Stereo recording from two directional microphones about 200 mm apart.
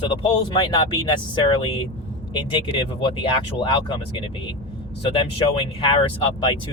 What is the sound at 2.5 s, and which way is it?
Speech, 25° left (ahead or behind).